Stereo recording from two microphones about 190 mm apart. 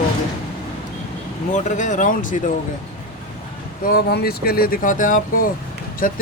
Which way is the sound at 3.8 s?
55° left (ahead or behind).